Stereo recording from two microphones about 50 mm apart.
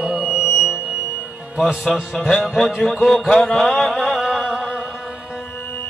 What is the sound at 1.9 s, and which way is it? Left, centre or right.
Music, centre.